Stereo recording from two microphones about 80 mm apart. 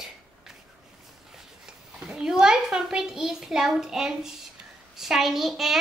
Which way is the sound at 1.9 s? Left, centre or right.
Centre.